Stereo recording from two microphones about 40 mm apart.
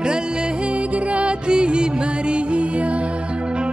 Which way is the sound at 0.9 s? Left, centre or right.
Right.